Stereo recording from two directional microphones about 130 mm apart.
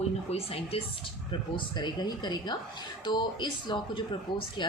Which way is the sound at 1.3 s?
35° left (ahead or behind).